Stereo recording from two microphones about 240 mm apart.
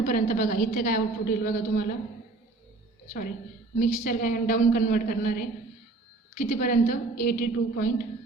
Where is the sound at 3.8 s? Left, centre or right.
Left.